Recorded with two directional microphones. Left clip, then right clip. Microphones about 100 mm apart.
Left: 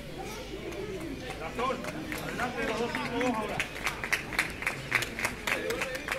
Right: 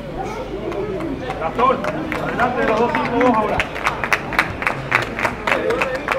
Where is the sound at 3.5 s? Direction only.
30° right (ahead or behind).